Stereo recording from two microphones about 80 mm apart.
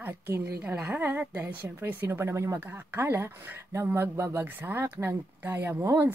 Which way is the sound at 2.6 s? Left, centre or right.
Right.